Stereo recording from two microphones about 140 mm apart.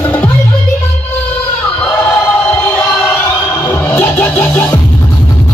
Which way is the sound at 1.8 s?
10° left (ahead or behind).